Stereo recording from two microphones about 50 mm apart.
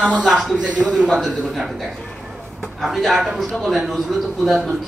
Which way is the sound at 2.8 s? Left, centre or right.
Centre.